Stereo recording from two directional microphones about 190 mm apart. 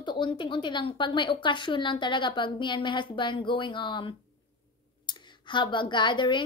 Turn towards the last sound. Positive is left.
turn(degrees=25)  # may be behind; listen again after turning